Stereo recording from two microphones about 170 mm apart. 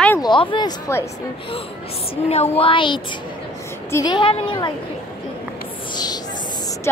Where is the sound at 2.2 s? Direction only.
35° left (ahead or behind).